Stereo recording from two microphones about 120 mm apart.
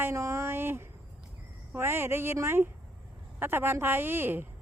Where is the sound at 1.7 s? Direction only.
20° right (ahead or behind).